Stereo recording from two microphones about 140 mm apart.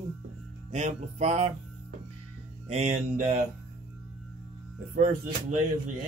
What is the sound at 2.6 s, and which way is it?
Speech, 50° right (ahead or behind).